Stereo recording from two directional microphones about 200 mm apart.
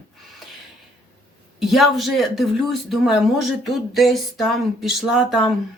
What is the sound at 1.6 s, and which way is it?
Speech, centre (ahead or behind).